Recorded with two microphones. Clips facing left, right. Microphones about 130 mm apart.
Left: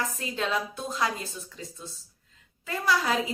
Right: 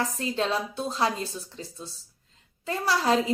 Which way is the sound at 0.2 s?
30° right (ahead or behind).